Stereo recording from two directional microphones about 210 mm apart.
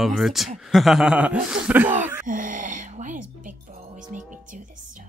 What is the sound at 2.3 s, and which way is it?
Speech, 40° right (ahead or behind).